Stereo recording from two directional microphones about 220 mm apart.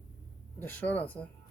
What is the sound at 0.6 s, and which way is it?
Speech, 5° left (ahead or behind).